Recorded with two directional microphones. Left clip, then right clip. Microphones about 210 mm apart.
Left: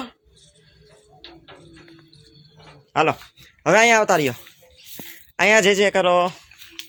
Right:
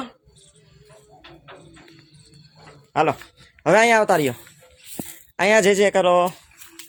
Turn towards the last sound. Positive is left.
turn(degrees=-10)  # may be behind; listen again after turning